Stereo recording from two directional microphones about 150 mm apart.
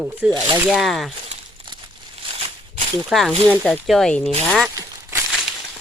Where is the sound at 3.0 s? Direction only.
Centre (ahead or behind).